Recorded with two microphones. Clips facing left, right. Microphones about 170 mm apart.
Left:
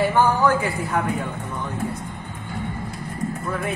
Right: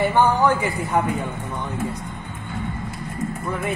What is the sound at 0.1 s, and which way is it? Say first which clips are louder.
Speech: right 1 dB; 15° right (ahead or behind).